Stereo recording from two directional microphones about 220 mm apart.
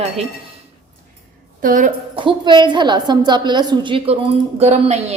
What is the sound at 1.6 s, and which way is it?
Speech, 35° right (ahead or behind).